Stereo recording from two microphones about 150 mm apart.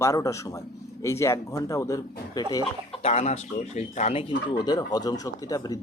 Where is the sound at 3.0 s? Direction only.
45° left (ahead or behind).